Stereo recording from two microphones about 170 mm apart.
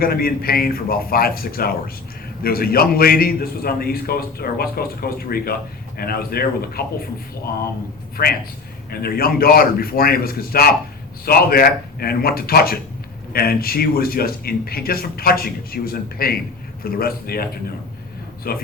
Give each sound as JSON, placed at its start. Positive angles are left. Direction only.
{"t": 0.0, "sound": "a man's voice", "side_deg": 60}
{"t": 8.2, "sound": "a man's voice", "side_deg": 55}